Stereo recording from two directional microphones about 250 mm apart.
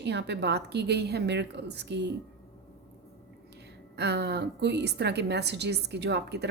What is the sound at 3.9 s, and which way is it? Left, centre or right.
A woman's voice, right.